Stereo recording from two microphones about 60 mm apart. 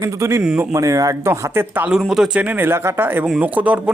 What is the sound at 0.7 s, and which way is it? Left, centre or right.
Speech, right.